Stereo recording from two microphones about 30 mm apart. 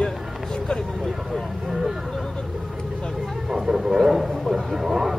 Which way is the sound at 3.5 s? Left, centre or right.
Centre.